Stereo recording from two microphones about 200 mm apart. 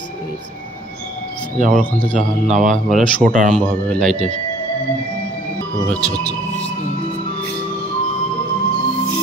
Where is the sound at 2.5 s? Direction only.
40° right (ahead or behind).